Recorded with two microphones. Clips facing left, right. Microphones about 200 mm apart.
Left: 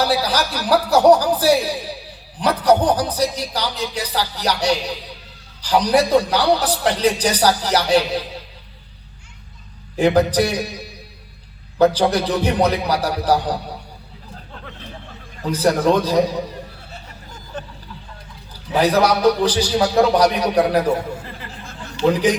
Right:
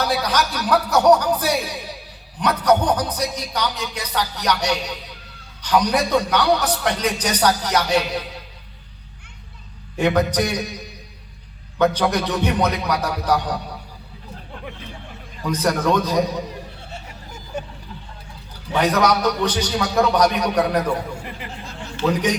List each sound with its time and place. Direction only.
0.0 s speech: 30° left (ahead or behind)
10.0 s speech: 30° left (ahead or behind)
11.8 s speech: 30° left (ahead or behind)
15.4 s speech: 30° left (ahead or behind)
17.5 s a sound: 10° right (ahead or behind)
18.7 s speech: 30° left (ahead or behind)
22.0 s a man's voice: 50° right (ahead or behind)